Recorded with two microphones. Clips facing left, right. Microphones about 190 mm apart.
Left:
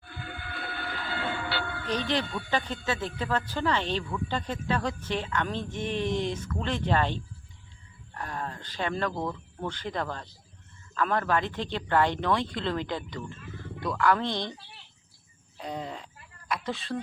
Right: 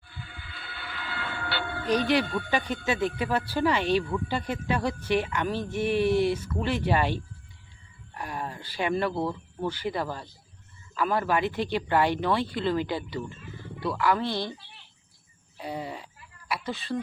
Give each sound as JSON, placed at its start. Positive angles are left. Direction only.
{"t": 0.1, "sound": "a sound", "side_deg": 60}
{"t": 1.9, "sound": "speech", "side_deg": -10}
{"t": 15.5, "sound": "a woman's voice", "side_deg": -5}